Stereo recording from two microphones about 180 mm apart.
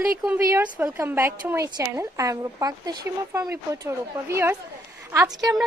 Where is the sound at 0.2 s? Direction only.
10° right (ahead or behind).